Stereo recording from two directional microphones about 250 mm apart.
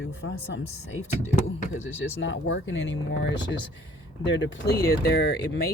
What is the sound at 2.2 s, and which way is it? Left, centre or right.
Speech, left.